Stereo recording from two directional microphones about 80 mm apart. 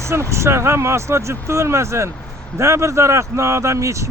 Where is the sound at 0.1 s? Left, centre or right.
Right.